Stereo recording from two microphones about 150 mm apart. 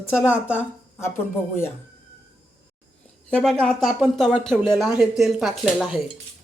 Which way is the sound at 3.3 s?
5° left (ahead or behind).